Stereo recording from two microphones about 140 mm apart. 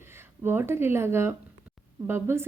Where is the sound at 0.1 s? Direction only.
15° right (ahead or behind).